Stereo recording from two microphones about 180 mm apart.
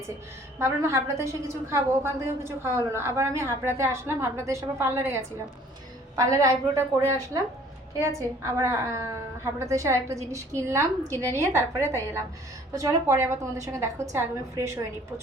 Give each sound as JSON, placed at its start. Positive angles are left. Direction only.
{"t": 0.6, "sound": "a woman's voice", "side_deg": -15}